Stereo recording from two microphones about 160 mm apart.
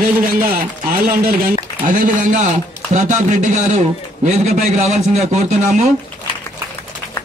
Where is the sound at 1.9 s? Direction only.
50° right (ahead or behind).